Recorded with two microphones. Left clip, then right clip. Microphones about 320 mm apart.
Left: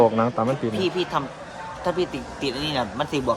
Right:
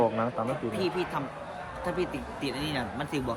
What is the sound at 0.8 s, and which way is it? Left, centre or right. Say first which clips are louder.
Speech: left 6 dB; centre.